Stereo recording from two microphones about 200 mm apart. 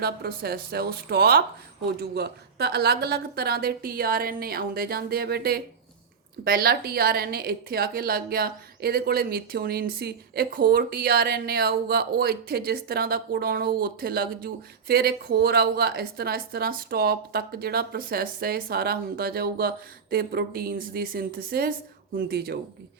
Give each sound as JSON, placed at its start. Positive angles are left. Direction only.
{"t": 0.0, "sound": "a woman's voice", "side_deg": -50}